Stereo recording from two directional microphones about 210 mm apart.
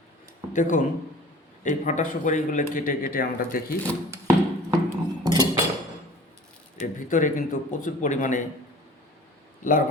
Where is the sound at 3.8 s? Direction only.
15° right (ahead or behind).